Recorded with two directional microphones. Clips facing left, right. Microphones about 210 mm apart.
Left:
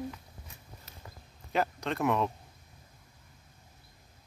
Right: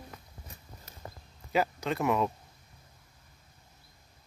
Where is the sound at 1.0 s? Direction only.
40° right (ahead or behind).